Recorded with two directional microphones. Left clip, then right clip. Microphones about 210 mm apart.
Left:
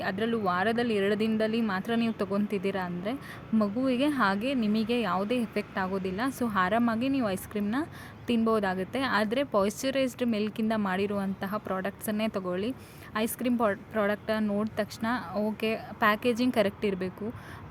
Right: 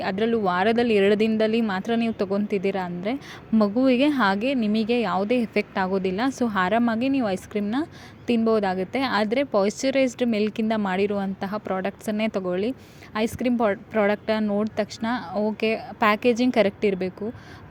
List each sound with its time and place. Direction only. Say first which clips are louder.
0.0 s a woman's voice: right 6 dB; 20° right (ahead or behind)